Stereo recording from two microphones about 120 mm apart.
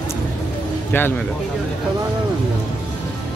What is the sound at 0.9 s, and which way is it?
Speech, 15° left (ahead or behind).